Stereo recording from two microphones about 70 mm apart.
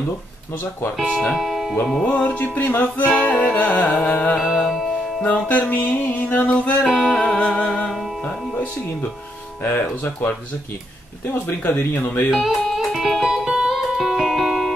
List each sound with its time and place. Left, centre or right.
1.3 s speech: centre
2.1 s music: left
4.4 s music: centre
5.2 s music: left
6.9 s music: centre
7.2 s music: centre
9.6 s speech: left
11.4 s music: left
12.3 s music: centre